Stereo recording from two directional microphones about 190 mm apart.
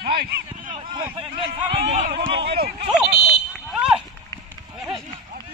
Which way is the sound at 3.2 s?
Centre (ahead or behind).